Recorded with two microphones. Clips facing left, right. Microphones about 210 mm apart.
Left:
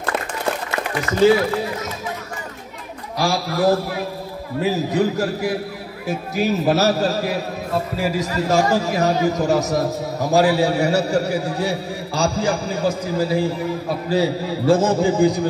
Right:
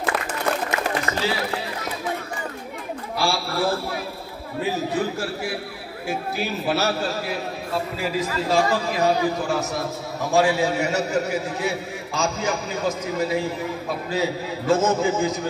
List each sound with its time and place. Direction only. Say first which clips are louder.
1.2 s a man's voice: left 16 dB; 50° left (ahead or behind)
3.2 s a man's voice: left 4 dB; 40° left (ahead or behind)
4.9 s a man's voice: left 6 dB; 40° left (ahead or behind)